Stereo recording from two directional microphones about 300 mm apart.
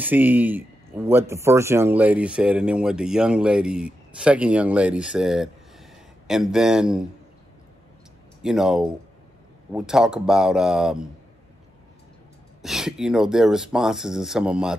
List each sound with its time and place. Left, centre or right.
0.0 s speech: centre
8.4 s speech: centre
12.6 s speech: centre